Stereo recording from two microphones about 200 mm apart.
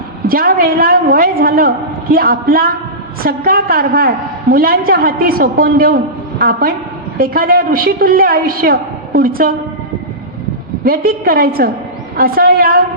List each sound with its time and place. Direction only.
0.3 s a woman's voice: 45° right (ahead or behind)
10.8 s a woman's voice: 45° right (ahead or behind)